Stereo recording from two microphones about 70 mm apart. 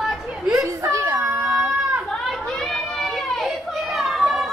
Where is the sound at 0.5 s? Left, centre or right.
Right.